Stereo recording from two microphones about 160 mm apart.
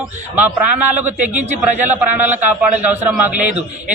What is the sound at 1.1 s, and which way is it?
Speech, 50° right (ahead or behind).